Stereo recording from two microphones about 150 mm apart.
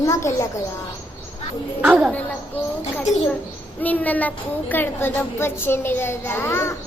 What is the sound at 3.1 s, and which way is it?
Speech, 50° left (ahead or behind).